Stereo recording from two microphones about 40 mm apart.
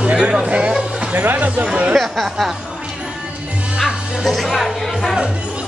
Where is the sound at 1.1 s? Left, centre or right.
Right.